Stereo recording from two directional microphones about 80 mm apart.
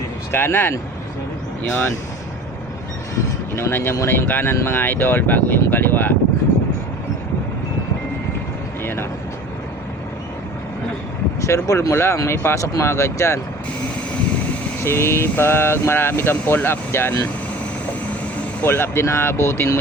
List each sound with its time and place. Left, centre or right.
0.3 s speech: left
3.5 s speech: left
8.8 s a sound: left
11.3 s speech: left
14.8 s speech: left
18.6 s speech: left